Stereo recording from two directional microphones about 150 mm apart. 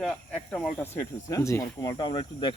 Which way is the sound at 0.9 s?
20° left (ahead or behind).